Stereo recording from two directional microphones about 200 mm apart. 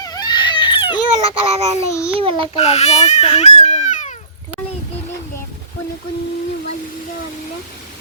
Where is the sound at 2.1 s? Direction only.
25° right (ahead or behind).